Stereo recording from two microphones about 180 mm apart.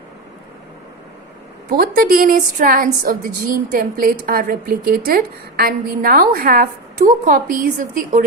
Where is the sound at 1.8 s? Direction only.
55° right (ahead or behind).